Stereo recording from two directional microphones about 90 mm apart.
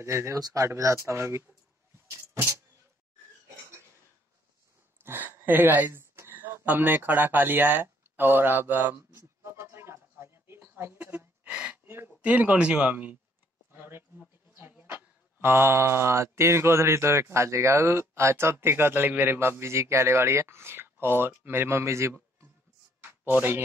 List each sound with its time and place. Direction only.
0.0 s speech: 30° right (ahead or behind)
5.0 s speech: 25° right (ahead or behind)
9.1 s a sound: 30° right (ahead or behind); by 11.8 s 10° right (ahead or behind)
11.8 s speech: 25° right (ahead or behind)
14.5 s a sound: 25° right (ahead or behind)
15.4 s speech: 25° right (ahead or behind)